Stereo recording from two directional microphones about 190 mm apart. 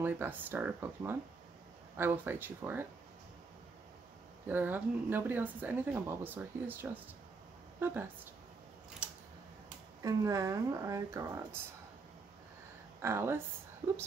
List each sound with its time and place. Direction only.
0.0 s speech: 10° right (ahead or behind)
4.5 s speech: 10° right (ahead or behind)
9.0 s scissors: 5° right (ahead or behind)
10.0 s speech: 15° right (ahead or behind)
13.0 s speech: 15° right (ahead or behind)